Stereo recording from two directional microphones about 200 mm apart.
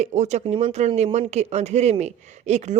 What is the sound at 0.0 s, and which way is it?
Speech, 35° right (ahead or behind).